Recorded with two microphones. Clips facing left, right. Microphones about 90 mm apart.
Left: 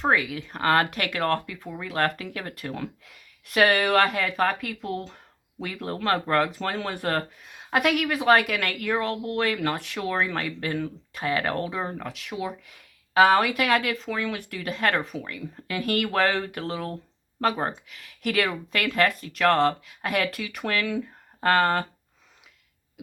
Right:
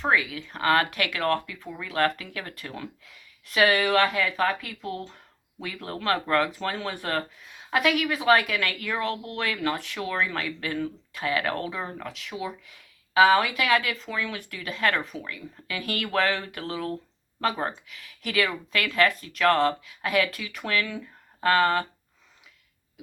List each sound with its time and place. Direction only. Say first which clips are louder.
0.0 s speech: left 1 dB; 45° left (ahead or behind)
8.9 s speech: left 6 dB; 40° left (ahead or behind)
12.1 s speech: left 2 dB; 50° left (ahead or behind)